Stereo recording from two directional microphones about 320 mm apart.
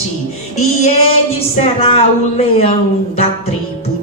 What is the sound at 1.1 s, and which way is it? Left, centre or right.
Speech, centre.